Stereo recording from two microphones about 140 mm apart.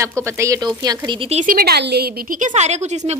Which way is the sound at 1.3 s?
75° right (ahead or behind).